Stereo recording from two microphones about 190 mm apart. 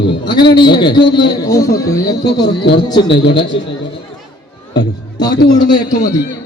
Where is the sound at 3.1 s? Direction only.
65° left (ahead or behind).